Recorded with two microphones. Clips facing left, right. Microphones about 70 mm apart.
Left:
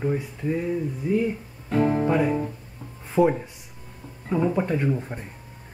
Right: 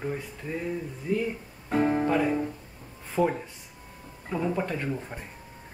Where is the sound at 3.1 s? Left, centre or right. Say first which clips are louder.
Left 5 dB; centre.